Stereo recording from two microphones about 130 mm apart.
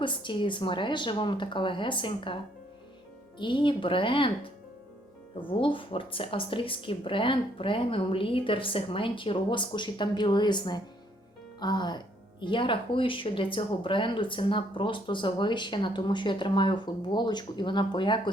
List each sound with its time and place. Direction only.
0.0 s speech: 40° left (ahead or behind)